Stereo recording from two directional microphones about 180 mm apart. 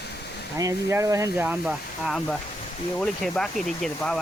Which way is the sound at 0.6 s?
20° right (ahead or behind).